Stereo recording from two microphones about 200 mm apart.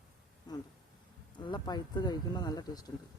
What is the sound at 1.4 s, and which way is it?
Speech, 20° left (ahead or behind).